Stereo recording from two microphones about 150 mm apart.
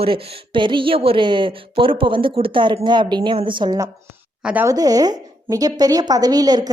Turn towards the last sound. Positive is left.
turn(degrees=-25)  # may be behind; listen again after turning